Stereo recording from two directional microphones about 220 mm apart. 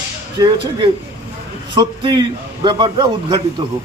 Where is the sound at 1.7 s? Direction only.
20° right (ahead or behind).